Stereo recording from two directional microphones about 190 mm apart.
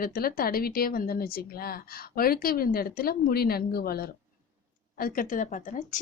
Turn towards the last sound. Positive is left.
turn(degrees=40)  # may be behind; listen again after turning